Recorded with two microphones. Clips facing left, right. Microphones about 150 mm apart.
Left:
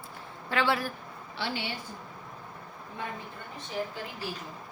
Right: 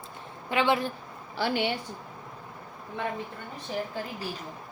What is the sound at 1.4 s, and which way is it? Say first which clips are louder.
Speech: right 7 dB; 60° right (ahead or behind).